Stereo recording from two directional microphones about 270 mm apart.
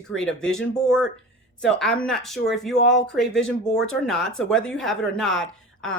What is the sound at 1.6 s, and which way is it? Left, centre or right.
A woman's voice, centre.